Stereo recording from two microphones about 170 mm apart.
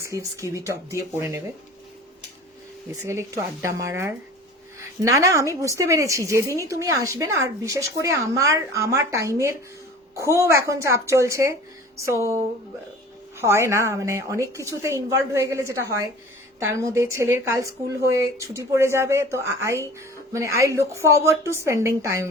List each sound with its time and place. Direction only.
0.0 s speech: 20° right (ahead or behind)
3.0 s a woman's voice: 15° right (ahead or behind)
13.4 s speech: 15° right (ahead or behind)